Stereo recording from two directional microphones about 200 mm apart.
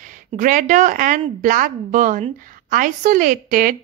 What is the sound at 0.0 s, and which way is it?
Speech, 40° right (ahead or behind).